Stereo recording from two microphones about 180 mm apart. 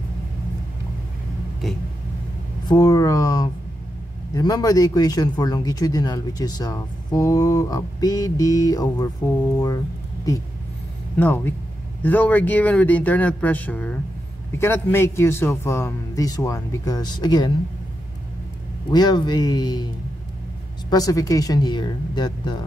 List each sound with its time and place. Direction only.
2.7 s speech: 20° left (ahead or behind)
10.3 s a man's voice: 20° left (ahead or behind)
18.9 s speech: 25° left (ahead or behind)
20.9 s speech: 20° left (ahead or behind)